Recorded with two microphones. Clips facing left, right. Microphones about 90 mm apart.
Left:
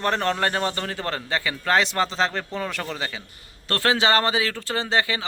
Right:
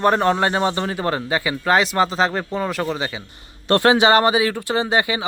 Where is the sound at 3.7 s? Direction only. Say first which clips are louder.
Right 7 dB; 20° right (ahead or behind).